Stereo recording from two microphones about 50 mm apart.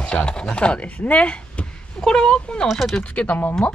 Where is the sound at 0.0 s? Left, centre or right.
Centre.